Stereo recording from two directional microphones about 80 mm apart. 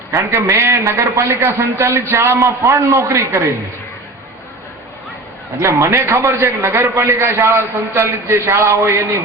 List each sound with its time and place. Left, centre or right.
0.1 s a man's voice: right
5.5 s a man's voice: right